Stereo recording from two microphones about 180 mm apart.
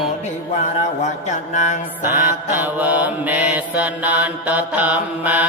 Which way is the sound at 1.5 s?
40° left (ahead or behind).